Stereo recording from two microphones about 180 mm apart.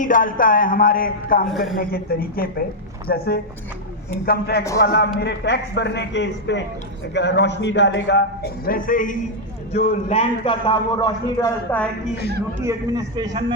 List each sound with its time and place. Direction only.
0.0 s speech: 50° left (ahead or behind)
1.5 s speech: centre (ahead or behind)
1.8 s a woman's voice: 55° left (ahead or behind)
5.2 s speech: 70° left (ahead or behind); by 9.1 s 50° left (ahead or behind)
9.7 s a man's voice: 35° left (ahead or behind)
11.3 s speech: 10° left (ahead or behind)
12.6 s a man's voice: 20° right (ahead or behind)